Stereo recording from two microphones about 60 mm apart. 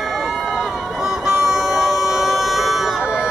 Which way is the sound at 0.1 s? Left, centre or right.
Centre.